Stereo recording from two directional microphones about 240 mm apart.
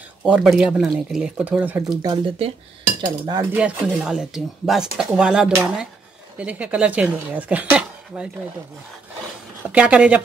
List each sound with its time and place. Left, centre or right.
0.2 s speech: centre; by 2.5 s right
3.0 s cutlery: centre
3.5 s speech: centre
9.7 s speech: centre